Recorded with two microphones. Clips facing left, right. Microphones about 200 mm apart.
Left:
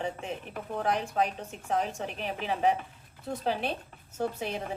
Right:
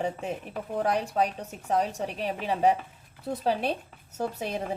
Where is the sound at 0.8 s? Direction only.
40° right (ahead or behind).